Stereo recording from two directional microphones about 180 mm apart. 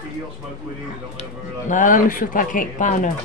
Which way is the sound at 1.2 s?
45° left (ahead or behind).